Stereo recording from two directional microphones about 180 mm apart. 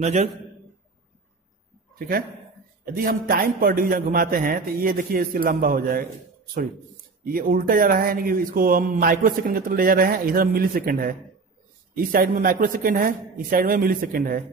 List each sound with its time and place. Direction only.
0.0 s a man's voice: 40° right (ahead or behind)
2.0 s a man's voice: 55° right (ahead or behind)
7.2 s a man's voice: 55° right (ahead or behind)